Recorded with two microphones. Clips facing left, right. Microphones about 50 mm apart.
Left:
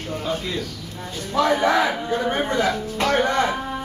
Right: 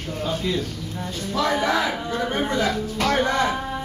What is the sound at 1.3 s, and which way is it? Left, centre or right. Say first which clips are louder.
Speech: left 3 dB; left.